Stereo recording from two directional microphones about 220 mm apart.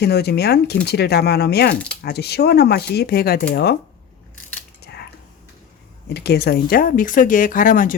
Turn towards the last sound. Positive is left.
turn(degrees=40)  # may be behind; listen again after turning